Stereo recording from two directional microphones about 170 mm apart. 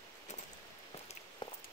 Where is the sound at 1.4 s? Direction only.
30° left (ahead or behind).